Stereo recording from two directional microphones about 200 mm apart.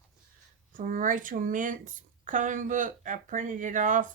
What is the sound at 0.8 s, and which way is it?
Speech, 40° right (ahead or behind).